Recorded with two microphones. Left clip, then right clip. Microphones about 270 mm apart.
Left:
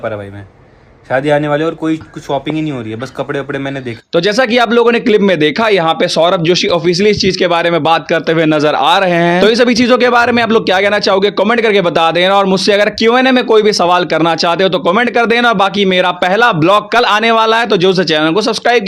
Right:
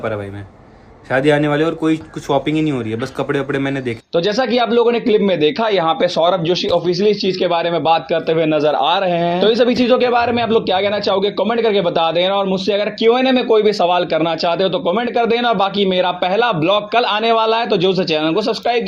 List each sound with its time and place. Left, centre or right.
1.1 s speech: centre
4.1 s a man's voice: left